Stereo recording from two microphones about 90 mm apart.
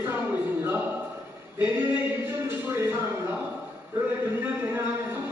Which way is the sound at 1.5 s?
25° right (ahead or behind).